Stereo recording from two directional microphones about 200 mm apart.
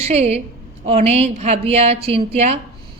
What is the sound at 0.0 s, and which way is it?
A woman's voice, 30° right (ahead or behind).